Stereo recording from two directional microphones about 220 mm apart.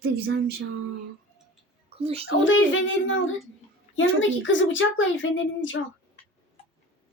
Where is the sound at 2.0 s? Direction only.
25° right (ahead or behind).